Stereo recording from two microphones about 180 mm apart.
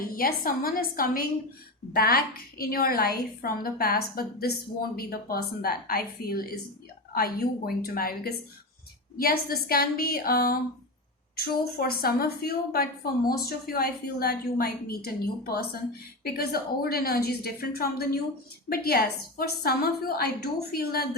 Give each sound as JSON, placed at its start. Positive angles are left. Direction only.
{"t": 0.0, "sound": "a woman's voice", "side_deg": 55}